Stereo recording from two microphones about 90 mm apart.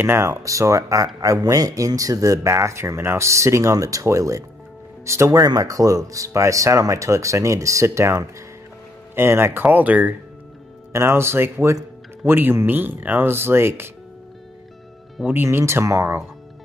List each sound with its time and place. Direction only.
0.0 s speech: 30° right (ahead or behind)
10.9 s speech: 30° right (ahead or behind)
15.4 s speech: 30° right (ahead or behind)